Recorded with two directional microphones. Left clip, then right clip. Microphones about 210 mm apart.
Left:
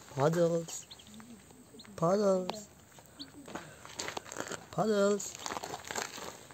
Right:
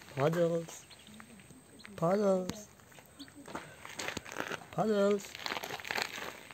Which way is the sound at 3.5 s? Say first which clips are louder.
Right 1 dB; 50° right (ahead or behind).